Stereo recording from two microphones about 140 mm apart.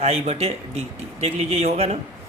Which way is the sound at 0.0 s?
50° right (ahead or behind).